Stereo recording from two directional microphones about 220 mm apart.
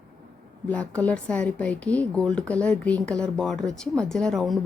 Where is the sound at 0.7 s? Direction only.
5° left (ahead or behind).